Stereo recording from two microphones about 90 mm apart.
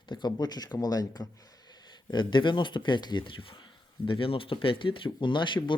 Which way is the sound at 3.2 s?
80° left.